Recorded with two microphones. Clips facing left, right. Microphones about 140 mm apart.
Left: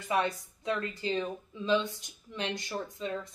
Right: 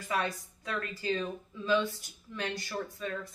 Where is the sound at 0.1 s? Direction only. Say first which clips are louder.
Left 3 dB; 20° left (ahead or behind).